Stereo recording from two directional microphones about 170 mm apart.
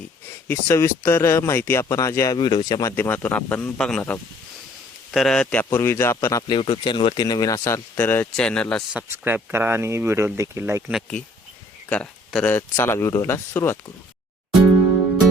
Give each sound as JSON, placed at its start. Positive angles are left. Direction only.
{"t": 0.4, "sound": "speech", "side_deg": 15}
{"t": 2.9, "sound": "speech", "side_deg": 10}
{"t": 8.9, "sound": "speech", "side_deg": -10}
{"t": 11.9, "sound": "speech", "side_deg": 5}